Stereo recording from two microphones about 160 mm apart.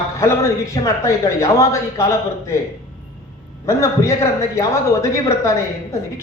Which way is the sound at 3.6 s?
20° left (ahead or behind).